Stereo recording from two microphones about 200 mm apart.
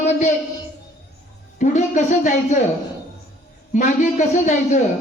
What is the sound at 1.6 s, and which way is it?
Speech, 35° left (ahead or behind).